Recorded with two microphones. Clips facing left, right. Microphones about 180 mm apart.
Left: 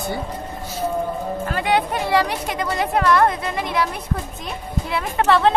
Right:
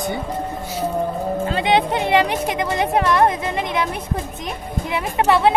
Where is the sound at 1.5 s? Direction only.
20° right (ahead or behind).